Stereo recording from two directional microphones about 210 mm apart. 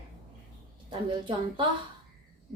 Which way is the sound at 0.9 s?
20° right (ahead or behind).